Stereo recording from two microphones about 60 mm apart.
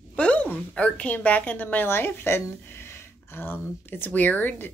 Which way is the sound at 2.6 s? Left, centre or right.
Left.